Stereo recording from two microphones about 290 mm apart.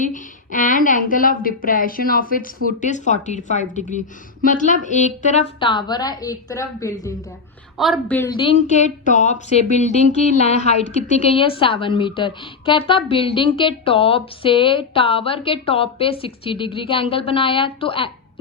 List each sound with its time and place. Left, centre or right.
0.0 s a woman's voice: left; by 8.3 s centre
8.4 s a woman's voice: left